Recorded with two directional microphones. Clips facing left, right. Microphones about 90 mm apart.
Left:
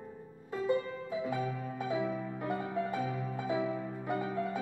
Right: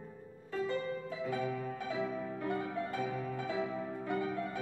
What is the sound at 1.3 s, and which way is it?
Music, 20° left (ahead or behind).